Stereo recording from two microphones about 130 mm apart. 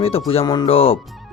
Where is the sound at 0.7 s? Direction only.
45° left (ahead or behind).